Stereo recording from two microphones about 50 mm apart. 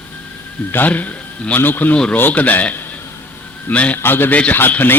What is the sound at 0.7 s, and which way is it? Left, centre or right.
A man's voice, left.